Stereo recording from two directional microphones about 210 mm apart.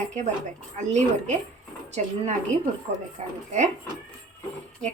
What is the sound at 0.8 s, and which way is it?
Speech, 35° right (ahead or behind).